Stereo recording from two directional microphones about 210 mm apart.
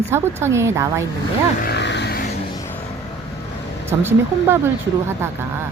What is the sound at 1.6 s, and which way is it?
Vehicle, 50° left (ahead or behind).